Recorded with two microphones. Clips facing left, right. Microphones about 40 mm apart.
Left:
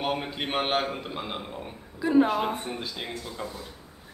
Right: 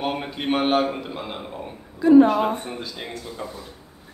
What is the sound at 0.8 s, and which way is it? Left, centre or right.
Speech, centre.